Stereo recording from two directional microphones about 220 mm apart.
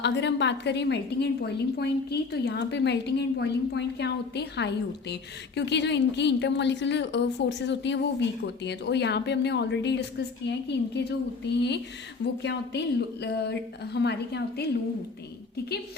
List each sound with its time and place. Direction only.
0.0 s a woman's voice: 50° left (ahead or behind)